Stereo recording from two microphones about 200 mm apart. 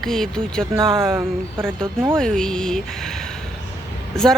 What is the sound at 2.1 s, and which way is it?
Speech, 5° left (ahead or behind).